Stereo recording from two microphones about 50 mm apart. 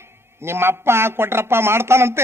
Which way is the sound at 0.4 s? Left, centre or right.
Right.